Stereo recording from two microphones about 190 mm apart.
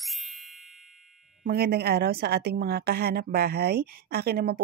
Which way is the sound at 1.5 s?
55° right (ahead or behind).